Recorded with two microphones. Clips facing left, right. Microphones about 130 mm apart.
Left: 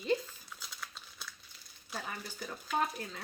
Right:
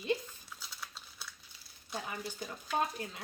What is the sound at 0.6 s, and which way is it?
Crumpling, centre (ahead or behind).